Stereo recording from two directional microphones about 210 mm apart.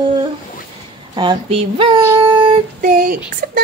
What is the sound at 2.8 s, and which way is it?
Speech, 40° right (ahead or behind).